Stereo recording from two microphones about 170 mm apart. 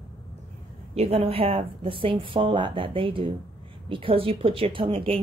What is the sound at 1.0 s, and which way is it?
A woman's voice, 35° right (ahead or behind).